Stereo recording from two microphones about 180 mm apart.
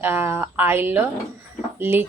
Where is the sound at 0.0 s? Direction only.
10° right (ahead or behind).